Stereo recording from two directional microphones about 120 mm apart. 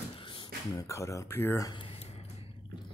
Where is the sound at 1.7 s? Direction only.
50° left (ahead or behind).